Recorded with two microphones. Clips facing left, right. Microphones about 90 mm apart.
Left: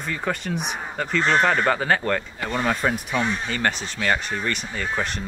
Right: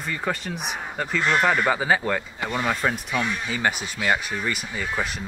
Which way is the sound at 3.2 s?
35° left (ahead or behind).